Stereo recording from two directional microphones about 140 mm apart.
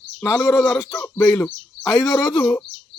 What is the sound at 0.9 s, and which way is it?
Speech, 15° left (ahead or behind).